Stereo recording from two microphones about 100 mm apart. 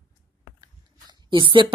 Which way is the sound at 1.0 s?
55° right (ahead or behind).